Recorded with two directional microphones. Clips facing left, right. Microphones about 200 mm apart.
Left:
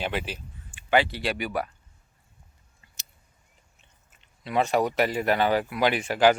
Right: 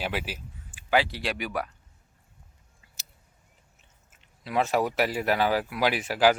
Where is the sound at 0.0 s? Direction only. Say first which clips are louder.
Left 1 dB; 5° right (ahead or behind).